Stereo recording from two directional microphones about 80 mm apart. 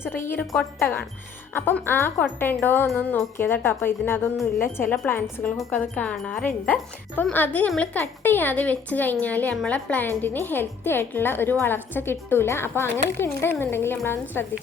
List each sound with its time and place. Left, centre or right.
0.0 s a woman's voice: left